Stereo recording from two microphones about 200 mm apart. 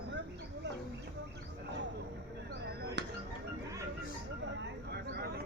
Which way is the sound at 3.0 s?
60° right (ahead or behind).